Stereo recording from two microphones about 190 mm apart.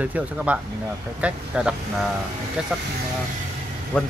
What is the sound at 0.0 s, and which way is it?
Speech, 5° right (ahead or behind).